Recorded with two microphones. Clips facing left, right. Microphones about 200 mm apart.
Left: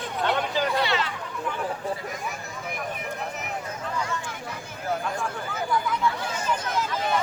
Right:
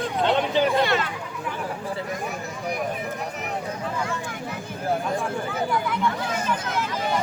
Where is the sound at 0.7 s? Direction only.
50° right (ahead or behind).